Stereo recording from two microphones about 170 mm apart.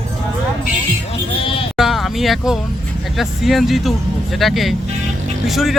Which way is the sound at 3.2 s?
Centre (ahead or behind).